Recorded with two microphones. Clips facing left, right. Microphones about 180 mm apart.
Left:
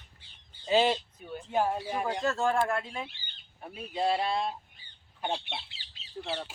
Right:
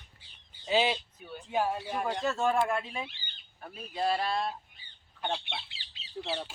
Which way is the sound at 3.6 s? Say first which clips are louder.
Left 2 dB; 20° left (ahead or behind).